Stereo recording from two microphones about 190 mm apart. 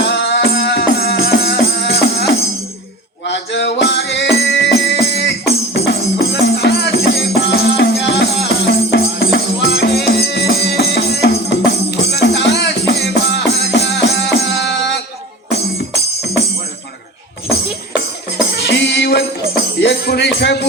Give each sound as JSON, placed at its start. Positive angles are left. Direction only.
{"t": 0.0, "sound": "music", "side_deg": 60}
{"t": 17.5, "sound": "music", "side_deg": 60}